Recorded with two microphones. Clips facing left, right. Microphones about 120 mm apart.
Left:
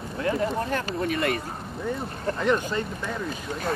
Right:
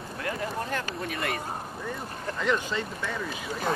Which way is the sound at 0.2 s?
25° left (ahead or behind).